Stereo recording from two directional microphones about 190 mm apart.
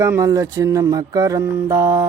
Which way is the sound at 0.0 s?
15° right (ahead or behind).